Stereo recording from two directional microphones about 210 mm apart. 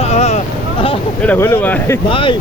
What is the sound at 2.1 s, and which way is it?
Speech, 25° left (ahead or behind).